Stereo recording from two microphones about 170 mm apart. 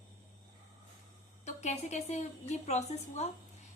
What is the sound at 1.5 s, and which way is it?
A woman's voice, 40° left (ahead or behind).